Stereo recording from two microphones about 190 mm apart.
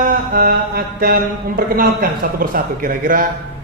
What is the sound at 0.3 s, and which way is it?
A man's voice, 50° right (ahead or behind).